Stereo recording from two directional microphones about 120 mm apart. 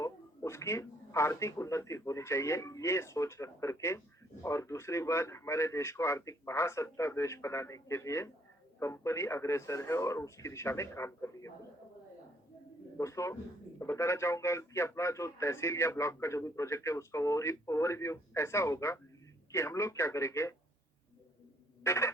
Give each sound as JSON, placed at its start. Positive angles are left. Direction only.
{"t": 0.0, "sound": "a man's voice", "side_deg": 25}
{"t": 13.0, "sound": "a man's voice", "side_deg": 25}
{"t": 21.8, "sound": "a man's voice", "side_deg": 25}